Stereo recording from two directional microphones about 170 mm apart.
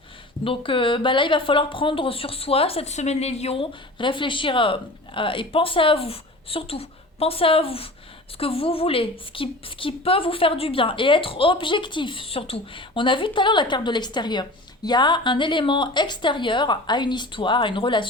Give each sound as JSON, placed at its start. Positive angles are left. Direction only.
{"t": 0.4, "sound": "a woman's voice", "side_deg": 30}